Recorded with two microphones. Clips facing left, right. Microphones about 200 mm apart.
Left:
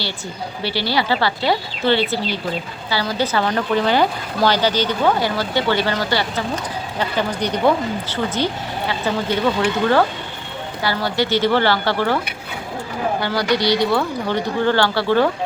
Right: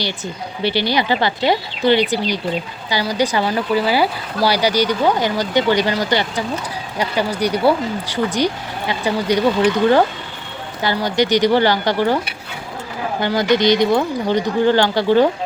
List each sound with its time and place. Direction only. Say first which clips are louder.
0.6 s speech: right 3 dB; 20° right (ahead or behind)
13.2 s speech: right 6 dB; 20° right (ahead or behind)